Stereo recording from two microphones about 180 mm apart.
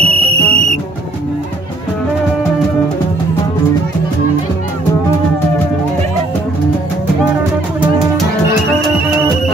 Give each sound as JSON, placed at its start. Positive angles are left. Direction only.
{"t": 0.0, "sound": "cricket", "side_deg": -35}